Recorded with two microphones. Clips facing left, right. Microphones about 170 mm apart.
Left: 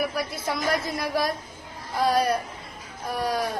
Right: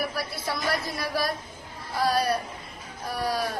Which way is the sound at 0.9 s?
20° left (ahead or behind).